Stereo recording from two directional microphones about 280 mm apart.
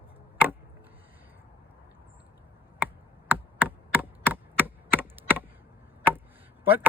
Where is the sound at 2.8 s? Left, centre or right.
Centre.